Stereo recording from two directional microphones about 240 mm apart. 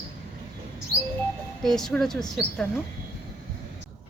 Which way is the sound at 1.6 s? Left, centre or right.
Centre.